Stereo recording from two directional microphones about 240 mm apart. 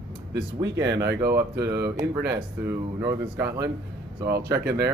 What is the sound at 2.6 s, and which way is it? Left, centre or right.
Speech, centre.